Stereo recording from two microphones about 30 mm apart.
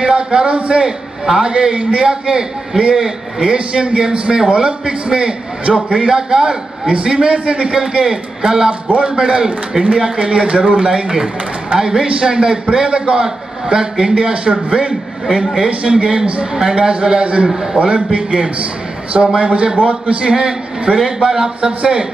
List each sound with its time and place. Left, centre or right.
0.0 s a man's voice: right
0.8 s a man's voice: right
8.0 s a man's voice: right
19.9 s a man's voice: right
20.2 s a man's voice: right